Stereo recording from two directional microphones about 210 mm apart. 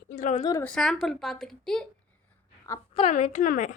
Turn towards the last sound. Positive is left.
turn(degrees=40)  # may be behind; listen again after turning